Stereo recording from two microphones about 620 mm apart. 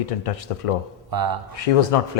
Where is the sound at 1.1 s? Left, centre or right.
Right.